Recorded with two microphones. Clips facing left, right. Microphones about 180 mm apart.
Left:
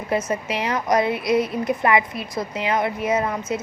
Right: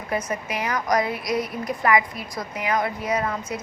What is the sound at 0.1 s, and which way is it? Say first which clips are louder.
A woman's voice: left 4 dB; 25° left (ahead or behind).